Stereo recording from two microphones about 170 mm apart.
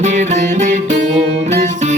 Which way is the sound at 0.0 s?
45° right (ahead or behind).